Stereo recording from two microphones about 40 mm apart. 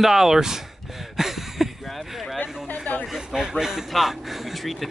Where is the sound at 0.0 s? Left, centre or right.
Centre.